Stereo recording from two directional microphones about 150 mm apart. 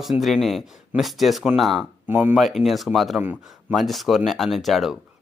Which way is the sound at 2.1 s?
15° right (ahead or behind).